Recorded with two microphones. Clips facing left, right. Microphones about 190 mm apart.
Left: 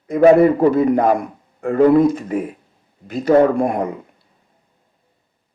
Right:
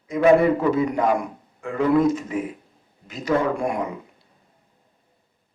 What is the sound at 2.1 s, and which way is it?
Speech, 55° left (ahead or behind).